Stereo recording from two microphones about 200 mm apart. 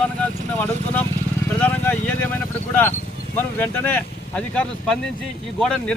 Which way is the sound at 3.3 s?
10° left (ahead or behind).